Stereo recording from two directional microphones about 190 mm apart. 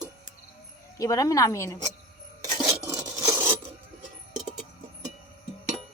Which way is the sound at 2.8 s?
20° right (ahead or behind).